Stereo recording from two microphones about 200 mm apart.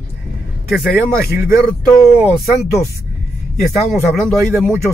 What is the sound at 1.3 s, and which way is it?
Speech, 5° right (ahead or behind).